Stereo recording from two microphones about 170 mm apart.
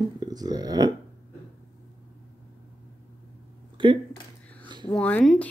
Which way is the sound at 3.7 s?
30° right (ahead or behind).